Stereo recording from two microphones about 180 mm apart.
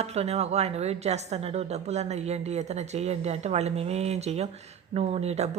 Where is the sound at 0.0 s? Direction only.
35° right (ahead or behind).